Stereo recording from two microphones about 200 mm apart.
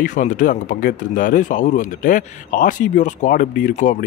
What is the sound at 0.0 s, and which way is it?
Speech, 40° left (ahead or behind).